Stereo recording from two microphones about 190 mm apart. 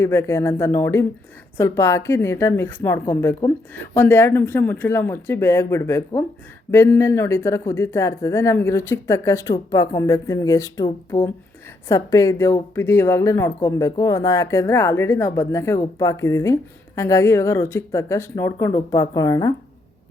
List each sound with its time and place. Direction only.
0.0 s a woman's voice: 15° left (ahead or behind)